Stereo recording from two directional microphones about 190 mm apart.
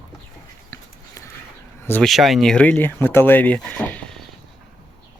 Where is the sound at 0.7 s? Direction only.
15° left (ahead or behind).